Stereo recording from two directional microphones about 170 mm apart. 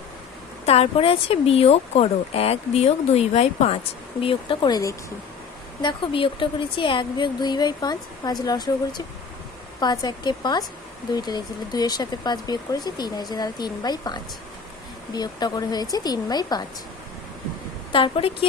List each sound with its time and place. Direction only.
0.6 s speech: 35° left (ahead or behind)
17.9 s speech: 30° left (ahead or behind)